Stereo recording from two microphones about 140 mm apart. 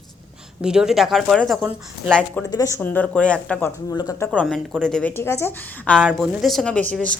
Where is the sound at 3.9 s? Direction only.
25° left (ahead or behind).